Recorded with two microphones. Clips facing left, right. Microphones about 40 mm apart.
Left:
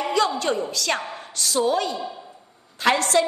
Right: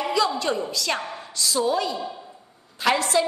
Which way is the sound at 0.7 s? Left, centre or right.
Left.